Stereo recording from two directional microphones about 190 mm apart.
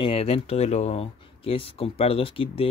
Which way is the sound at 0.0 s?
30° left (ahead or behind).